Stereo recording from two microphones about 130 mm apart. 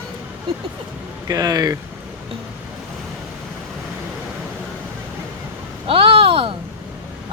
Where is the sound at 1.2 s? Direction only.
30° right (ahead or behind).